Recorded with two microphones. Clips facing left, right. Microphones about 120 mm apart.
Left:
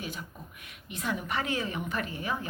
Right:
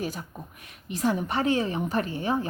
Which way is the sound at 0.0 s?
40° right (ahead or behind).